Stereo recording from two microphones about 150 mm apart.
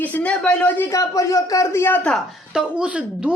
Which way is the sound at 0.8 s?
20° left (ahead or behind).